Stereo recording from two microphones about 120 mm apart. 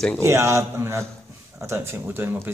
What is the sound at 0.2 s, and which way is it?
Speech, 25° right (ahead or behind).